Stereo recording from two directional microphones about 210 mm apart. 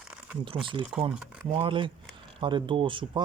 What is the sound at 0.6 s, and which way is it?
Speech, 25° right (ahead or behind).